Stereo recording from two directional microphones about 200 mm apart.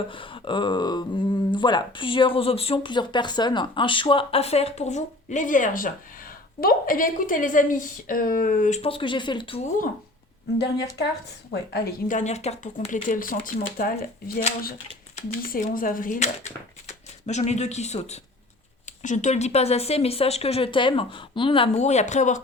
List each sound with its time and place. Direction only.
0.1 s speech: 25° left (ahead or behind)
10.6 s speech: 55° left (ahead or behind)
15.4 s speech: 45° left (ahead or behind)